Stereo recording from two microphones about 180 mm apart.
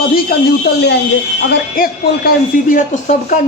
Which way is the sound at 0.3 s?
55° left (ahead or behind).